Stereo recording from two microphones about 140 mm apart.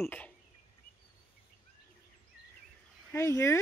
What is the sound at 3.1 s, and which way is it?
Speech, 20° left (ahead or behind).